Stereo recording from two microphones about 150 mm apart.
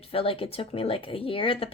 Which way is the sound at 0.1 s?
40° left (ahead or behind).